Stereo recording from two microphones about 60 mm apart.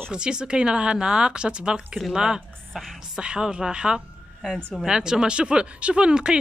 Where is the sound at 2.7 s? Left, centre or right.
Centre.